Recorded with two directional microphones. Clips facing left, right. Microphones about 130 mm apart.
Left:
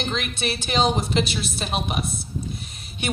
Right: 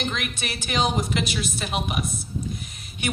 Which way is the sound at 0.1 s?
25° left (ahead or behind).